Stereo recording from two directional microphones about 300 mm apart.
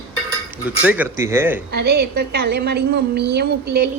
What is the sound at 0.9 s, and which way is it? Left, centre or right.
Speech, centre.